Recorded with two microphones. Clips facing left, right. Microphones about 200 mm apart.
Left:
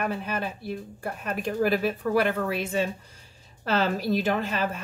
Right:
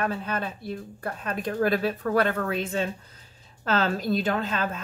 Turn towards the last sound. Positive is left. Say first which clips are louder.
# even
turn(degrees=15)  # may be behind; listen again after turning